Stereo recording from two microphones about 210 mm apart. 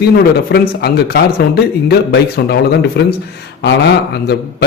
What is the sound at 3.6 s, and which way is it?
Speech, 55° left (ahead or behind).